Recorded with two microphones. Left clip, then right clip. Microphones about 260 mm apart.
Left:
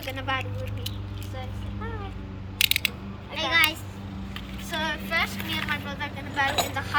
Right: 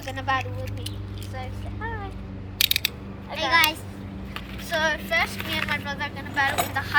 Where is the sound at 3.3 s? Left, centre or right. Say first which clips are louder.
Right 2 dB; centre.